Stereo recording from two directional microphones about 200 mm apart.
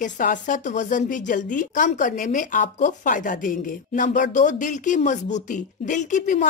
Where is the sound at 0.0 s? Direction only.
40° left (ahead or behind).